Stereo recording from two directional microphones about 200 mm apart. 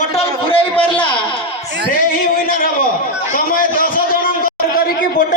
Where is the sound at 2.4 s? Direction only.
45° left (ahead or behind).